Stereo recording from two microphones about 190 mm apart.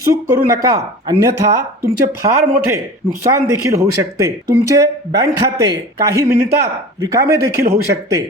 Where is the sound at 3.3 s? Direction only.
15° right (ahead or behind).